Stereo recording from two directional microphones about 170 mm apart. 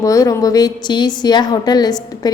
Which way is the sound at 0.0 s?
20° left (ahead or behind).